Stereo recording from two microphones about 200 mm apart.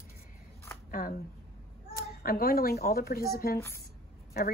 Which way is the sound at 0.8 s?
45° left (ahead or behind).